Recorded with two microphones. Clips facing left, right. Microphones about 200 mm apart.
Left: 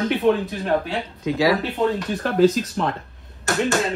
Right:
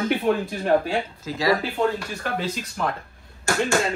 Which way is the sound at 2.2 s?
45° left (ahead or behind).